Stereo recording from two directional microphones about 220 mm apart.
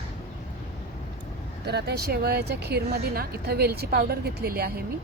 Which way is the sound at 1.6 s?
50° right (ahead or behind).